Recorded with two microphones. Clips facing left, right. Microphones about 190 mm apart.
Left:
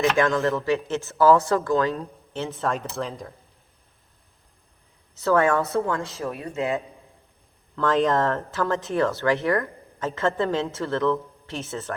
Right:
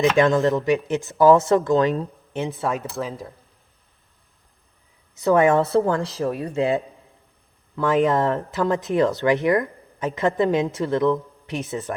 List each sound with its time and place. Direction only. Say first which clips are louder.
0.0 s speech: right 4 dB; 20° right (ahead or behind)
5.1 s speech: right 3 dB; 15° right (ahead or behind)
5.5 s speech: right 5 dB; 30° right (ahead or behind)
7.8 s speech: right 2 dB; 10° right (ahead or behind)